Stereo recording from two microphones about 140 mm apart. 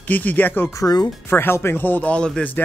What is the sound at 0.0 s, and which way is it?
Speech, 10° left (ahead or behind).